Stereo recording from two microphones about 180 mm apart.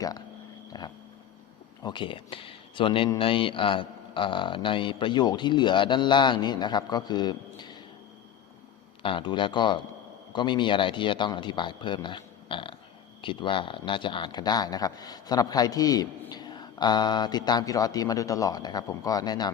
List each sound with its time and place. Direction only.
0.7 s speech: 20° left (ahead or behind)
9.0 s speech: 30° left (ahead or behind)